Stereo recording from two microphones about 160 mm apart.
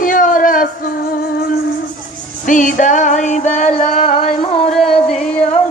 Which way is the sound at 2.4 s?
55° left (ahead or behind).